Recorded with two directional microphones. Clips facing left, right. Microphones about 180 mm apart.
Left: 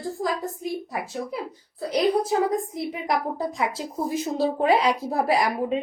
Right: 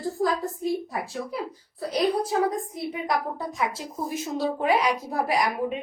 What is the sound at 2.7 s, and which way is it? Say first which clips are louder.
A woman's voice: left 1 dB; 20° left (ahead or behind).